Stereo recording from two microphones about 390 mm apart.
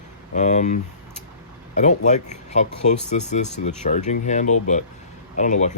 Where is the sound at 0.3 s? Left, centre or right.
Centre.